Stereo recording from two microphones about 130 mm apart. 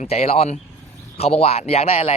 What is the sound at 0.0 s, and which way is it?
A man's voice, 55° left (ahead or behind).